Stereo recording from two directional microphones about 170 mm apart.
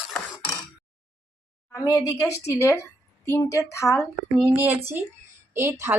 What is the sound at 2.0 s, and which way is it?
A woman's voice, 20° left (ahead or behind).